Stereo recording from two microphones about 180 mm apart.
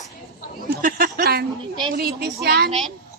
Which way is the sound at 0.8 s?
50° right (ahead or behind).